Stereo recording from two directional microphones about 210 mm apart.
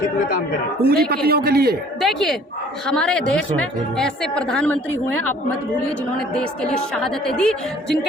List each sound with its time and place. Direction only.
0.8 s a man's voice: 45° right (ahead or behind)
2.0 s a woman's voice: centre (ahead or behind)
6.1 s a woman's voice: 5° left (ahead or behind)